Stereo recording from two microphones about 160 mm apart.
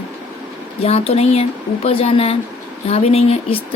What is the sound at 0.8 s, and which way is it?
A woman's voice, 40° left (ahead or behind).